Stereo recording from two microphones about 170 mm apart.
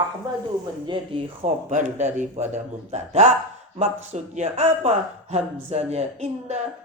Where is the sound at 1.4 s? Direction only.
45° right (ahead or behind).